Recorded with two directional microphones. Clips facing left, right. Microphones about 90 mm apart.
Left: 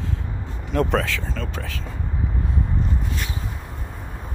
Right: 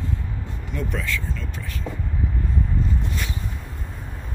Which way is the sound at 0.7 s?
90° left.